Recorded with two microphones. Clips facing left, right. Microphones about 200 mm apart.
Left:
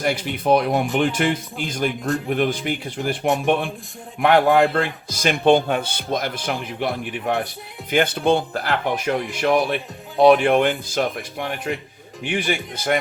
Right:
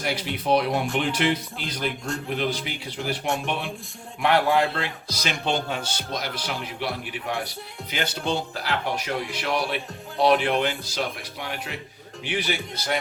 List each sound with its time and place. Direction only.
0.0 s speech: 50° left (ahead or behind)